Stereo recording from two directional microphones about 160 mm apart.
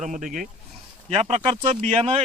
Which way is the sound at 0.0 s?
50° right (ahead or behind).